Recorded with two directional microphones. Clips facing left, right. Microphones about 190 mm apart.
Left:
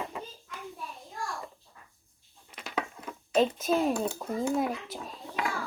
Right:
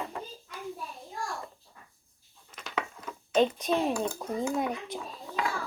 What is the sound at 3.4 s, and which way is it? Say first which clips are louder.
Speech: even; 5° left (ahead or behind).